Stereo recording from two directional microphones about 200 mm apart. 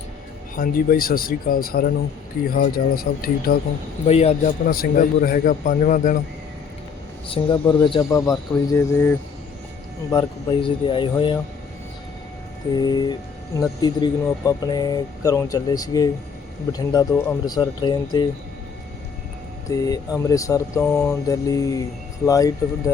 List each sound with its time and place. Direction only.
0.5 s a man's voice: 45° left (ahead or behind)
4.0 s a man's voice: 30° left (ahead or behind)
4.6 s a man's voice: 45° left (ahead or behind)
7.3 s speech: 25° left (ahead or behind)
10.1 s speech: 20° left (ahead or behind)
12.8 s speech: 20° left (ahead or behind)
19.7 s speech: 15° left (ahead or behind)